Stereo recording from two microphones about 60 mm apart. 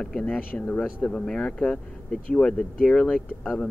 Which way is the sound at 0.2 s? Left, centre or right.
Left.